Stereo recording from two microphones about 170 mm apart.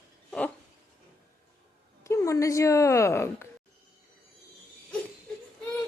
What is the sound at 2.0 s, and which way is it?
A woman's voice, 15° left (ahead or behind).